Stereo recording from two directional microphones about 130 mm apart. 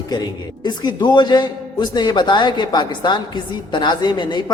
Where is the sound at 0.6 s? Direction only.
35° left (ahead or behind).